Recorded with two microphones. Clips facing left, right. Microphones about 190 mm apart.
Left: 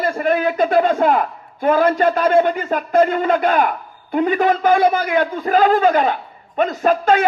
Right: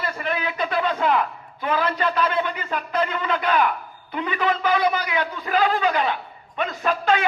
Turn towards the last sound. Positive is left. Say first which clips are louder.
# left 6 dB
turn(degrees=45)  # may be behind; listen again after turning